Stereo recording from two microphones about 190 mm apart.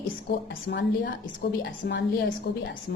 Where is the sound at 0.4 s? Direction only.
65° left (ahead or behind).